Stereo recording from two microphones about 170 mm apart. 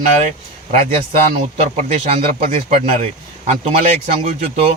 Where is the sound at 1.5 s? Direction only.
40° right (ahead or behind).